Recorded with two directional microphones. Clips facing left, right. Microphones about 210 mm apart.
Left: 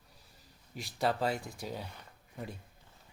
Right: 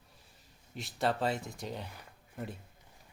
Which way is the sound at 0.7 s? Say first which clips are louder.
Even; centre (ahead or behind).